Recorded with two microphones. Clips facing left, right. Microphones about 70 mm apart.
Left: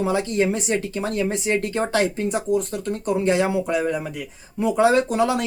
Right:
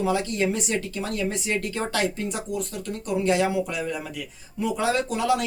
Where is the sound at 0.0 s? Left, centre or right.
Left.